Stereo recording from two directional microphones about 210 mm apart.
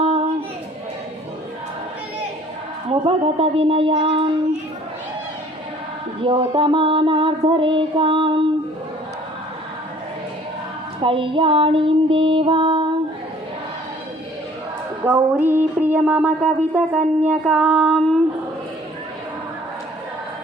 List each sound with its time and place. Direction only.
0.0 s a sound: 30° right (ahead or behind)
2.9 s child singing: 25° right (ahead or behind)
6.2 s child singing: 25° right (ahead or behind)
11.0 s child singing: 25° right (ahead or behind)
15.0 s music: 10° right (ahead or behind)